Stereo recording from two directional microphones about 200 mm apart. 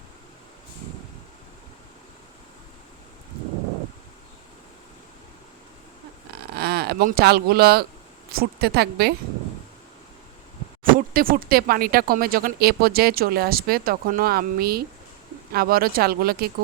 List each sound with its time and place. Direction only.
6.5 s speech: 50° right (ahead or behind)
11.1 s speech: 45° right (ahead or behind)